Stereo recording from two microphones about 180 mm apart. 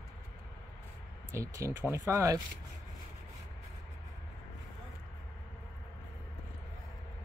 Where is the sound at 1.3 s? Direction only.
15° right (ahead or behind).